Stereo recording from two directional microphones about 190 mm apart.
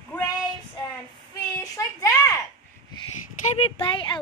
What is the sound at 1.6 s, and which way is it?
Child singing, 15° left (ahead or behind).